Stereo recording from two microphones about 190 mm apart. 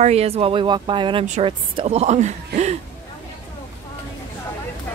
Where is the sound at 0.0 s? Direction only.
35° right (ahead or behind).